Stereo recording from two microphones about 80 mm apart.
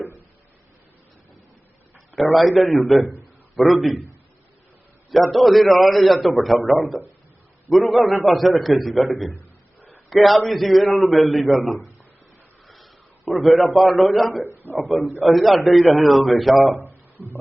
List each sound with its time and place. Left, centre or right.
2.3 s a man's voice: centre
5.3 s a man's voice: centre
9.3 s a sound: left
10.1 s a man's voice: centre
14.4 s a man's voice: right
14.8 s a man's voice: centre
16.7 s a sound: right